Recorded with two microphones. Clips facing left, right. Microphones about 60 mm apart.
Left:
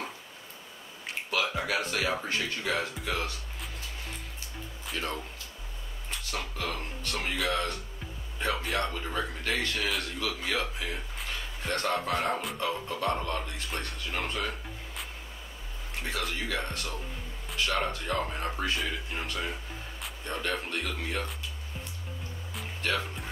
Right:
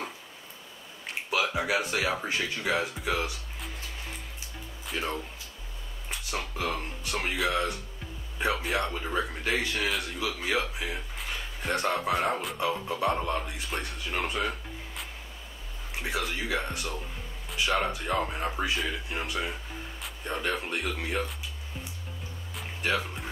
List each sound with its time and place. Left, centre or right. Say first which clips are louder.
1.3 s speech: right 2 dB; centre
4.9 s speech: right 2 dB; centre
16.0 s speech: right 2 dB; centre
22.8 s speech: right 2 dB; centre